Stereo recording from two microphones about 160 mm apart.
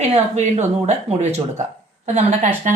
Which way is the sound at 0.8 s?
45° right (ahead or behind).